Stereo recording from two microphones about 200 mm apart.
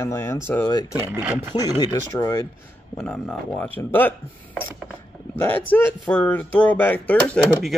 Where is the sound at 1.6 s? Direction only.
20° left (ahead or behind).